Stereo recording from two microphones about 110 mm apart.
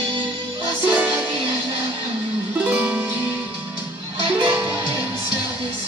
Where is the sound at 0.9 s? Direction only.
15° right (ahead or behind).